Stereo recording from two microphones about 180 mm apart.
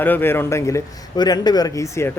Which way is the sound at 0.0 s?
10° left (ahead or behind).